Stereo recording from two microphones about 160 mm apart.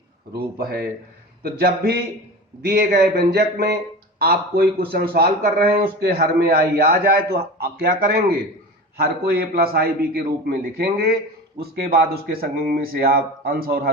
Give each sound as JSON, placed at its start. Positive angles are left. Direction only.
{"t": 0.3, "sound": "a man's voice", "side_deg": -75}
{"t": 7.6, "sound": "a man's voice", "side_deg": -80}